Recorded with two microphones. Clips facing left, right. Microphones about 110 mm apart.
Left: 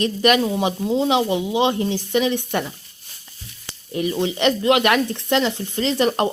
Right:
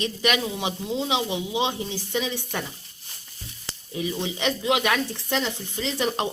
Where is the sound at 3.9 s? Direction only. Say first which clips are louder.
Left 7 dB; 65° left (ahead or behind).